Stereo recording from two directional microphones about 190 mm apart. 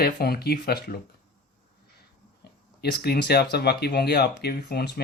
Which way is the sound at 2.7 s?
55° left (ahead or behind).